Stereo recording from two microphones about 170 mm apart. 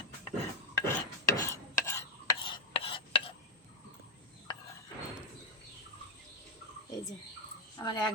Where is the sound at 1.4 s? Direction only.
15° left (ahead or behind).